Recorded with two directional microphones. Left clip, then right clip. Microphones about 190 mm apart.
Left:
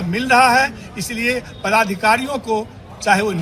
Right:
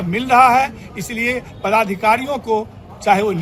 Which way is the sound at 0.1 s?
30° right (ahead or behind).